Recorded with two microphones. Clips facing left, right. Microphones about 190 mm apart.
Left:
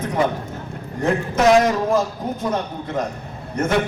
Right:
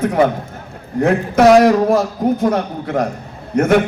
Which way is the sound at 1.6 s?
65° right (ahead or behind).